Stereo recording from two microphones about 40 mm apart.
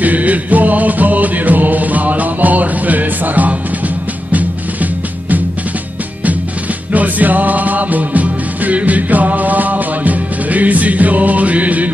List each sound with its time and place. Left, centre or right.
0.0 s music: right
6.9 s music: right